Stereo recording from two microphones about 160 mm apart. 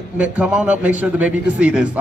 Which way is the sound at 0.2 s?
5° right (ahead or behind).